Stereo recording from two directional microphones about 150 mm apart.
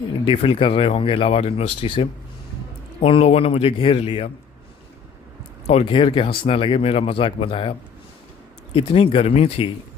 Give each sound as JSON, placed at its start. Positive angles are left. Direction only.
{"t": 0.3, "sound": "speech", "side_deg": 40}
{"t": 5.8, "sound": "speech", "side_deg": 35}
{"t": 8.7, "sound": "speech", "side_deg": 35}